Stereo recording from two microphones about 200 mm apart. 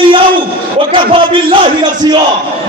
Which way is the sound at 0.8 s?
25° right (ahead or behind).